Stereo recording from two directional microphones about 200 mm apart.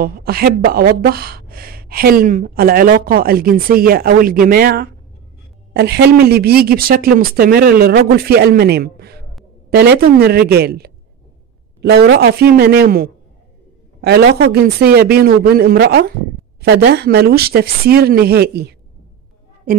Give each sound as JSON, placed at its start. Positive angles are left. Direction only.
{"t": 0.0, "sound": "speech", "side_deg": -50}